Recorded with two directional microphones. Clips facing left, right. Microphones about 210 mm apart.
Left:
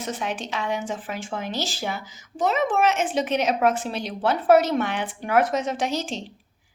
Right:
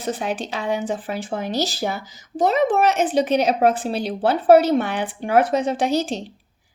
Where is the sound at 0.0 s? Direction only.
35° right (ahead or behind).